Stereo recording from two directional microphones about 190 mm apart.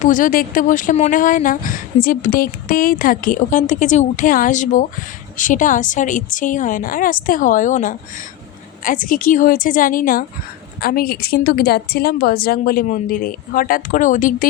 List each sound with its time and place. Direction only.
0.0 s speech: 45° left (ahead or behind)